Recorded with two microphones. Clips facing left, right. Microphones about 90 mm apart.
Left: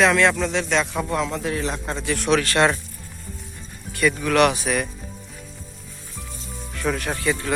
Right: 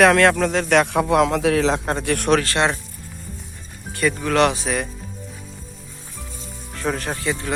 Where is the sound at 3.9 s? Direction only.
30° right (ahead or behind).